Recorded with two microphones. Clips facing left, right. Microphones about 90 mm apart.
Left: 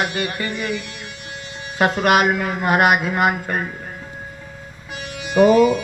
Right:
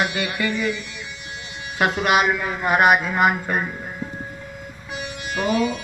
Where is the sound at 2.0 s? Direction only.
50° left (ahead or behind).